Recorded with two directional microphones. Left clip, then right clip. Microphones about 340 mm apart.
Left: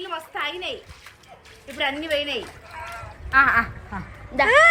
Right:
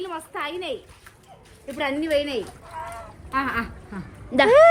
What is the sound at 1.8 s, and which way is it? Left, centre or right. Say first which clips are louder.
Speech: right 1 dB; right.